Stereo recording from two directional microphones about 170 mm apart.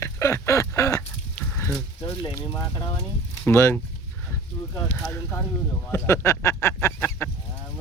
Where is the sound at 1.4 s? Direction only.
10° left (ahead or behind).